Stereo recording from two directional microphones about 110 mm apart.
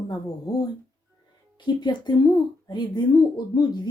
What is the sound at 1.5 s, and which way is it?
A woman's voice, 40° left (ahead or behind).